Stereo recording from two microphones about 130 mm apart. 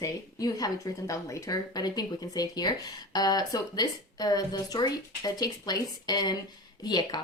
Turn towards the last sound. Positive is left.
turn(degrees=35)  # may be behind; listen again after turning